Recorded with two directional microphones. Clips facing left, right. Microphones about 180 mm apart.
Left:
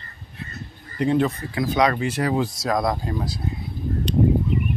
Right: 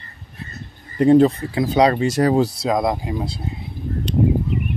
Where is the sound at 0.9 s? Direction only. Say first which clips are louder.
Right 8 dB; 40° right (ahead or behind).